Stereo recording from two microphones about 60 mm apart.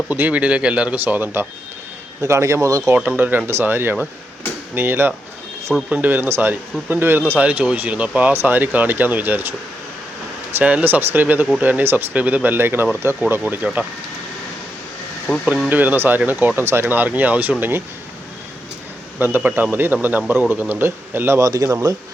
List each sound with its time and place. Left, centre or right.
0.1 s speech: right
1.0 s speech: right
2.2 s a man's voice: right
2.9 s speech: right
7.3 s speech: right
8.3 s speech: right
10.6 s speech: right
12.1 s speech: right
13.6 s speech: centre
15.3 s speech: centre
15.7 s speech: right
19.2 s speech: right
21.3 s a man's voice: right